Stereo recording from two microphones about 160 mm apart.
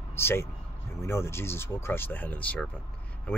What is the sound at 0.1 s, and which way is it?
Speech, 15° left (ahead or behind).